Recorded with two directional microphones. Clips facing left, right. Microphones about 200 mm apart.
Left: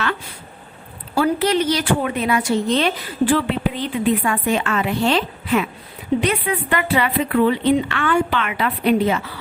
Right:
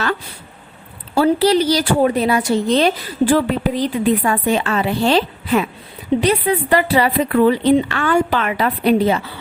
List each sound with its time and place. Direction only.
1.1 s speech: 35° right (ahead or behind)